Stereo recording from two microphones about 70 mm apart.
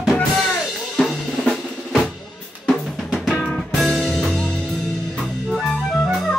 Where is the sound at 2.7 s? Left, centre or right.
Centre.